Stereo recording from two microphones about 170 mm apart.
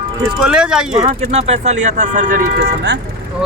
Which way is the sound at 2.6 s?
90° right.